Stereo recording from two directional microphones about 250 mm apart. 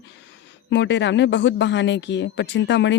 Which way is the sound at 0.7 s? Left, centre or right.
Left.